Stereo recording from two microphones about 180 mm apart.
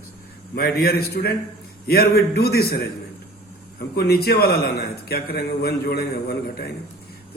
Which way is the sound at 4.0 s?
60° left (ahead or behind).